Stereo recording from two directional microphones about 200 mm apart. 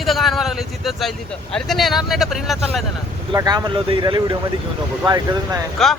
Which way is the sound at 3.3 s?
20° right (ahead or behind).